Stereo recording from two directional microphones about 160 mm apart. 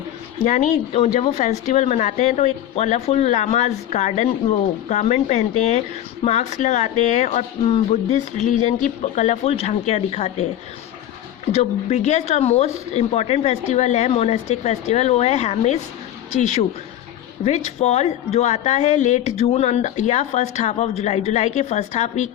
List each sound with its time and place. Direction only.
0.4 s speech: 50° left (ahead or behind)
11.5 s speech: 45° left (ahead or behind)